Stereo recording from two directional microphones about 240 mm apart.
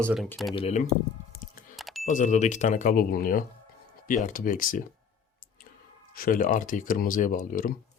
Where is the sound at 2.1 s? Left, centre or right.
Left.